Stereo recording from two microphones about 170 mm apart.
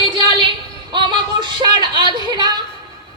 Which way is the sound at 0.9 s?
25° right (ahead or behind).